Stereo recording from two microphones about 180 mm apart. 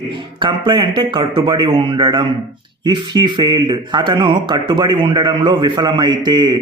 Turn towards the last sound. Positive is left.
turn(degrees=-25)  # may be behind; listen again after turning